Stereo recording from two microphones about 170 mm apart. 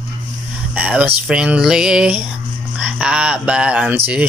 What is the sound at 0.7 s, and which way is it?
Speech, 10° right (ahead or behind).